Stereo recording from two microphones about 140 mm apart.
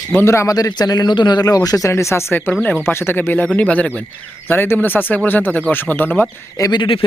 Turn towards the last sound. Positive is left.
turn(degrees=40)  # may be behind; listen again after turning